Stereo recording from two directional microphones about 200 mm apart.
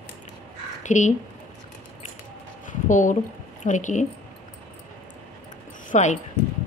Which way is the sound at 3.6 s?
40° left (ahead or behind).